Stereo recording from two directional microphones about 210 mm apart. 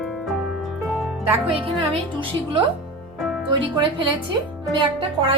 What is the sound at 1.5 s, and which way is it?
Speech, 25° right (ahead or behind).